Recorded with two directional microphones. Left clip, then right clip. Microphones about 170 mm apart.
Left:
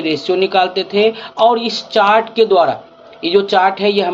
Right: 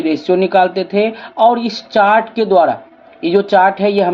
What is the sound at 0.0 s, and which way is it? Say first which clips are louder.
Speech: right 1 dB; 45° right (ahead or behind).